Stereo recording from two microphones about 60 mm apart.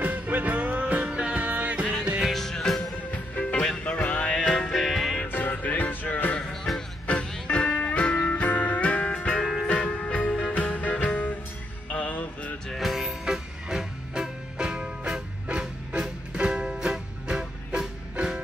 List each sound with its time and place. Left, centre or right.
0.0 s music: right
2.3 s music: centre
3.1 s music: left
4.4 s music: centre
5.2 s music: left
6.5 s music: centre
7.1 s music: centre
9.4 s music: centre
10.1 s music: left
12.6 s music: centre
13.2 s music: centre